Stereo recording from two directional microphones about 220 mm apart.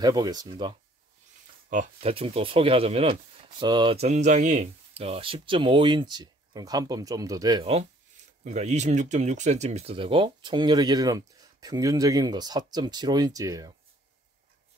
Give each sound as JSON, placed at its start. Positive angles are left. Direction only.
{"t": 0.0, "sound": "speech", "side_deg": -20}
{"t": 1.7, "sound": "speech", "side_deg": -30}